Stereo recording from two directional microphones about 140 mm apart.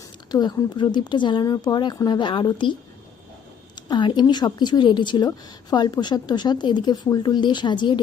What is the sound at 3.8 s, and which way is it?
Speech, 35° left (ahead or behind).